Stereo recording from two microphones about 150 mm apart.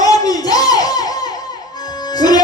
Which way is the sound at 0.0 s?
25° left (ahead or behind).